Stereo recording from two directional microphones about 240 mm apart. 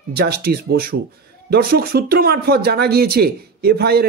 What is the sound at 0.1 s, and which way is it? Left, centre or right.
Speech, right.